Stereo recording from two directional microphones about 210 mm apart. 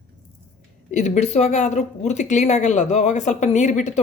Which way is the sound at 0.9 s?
35° left (ahead or behind).